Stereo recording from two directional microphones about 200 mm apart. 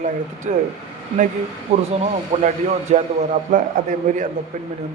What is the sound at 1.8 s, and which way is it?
Speech, 30° right (ahead or behind).